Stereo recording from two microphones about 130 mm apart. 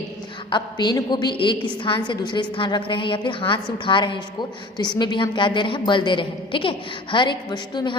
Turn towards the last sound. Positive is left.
turn(degrees=35)  # may be behind; listen again after turning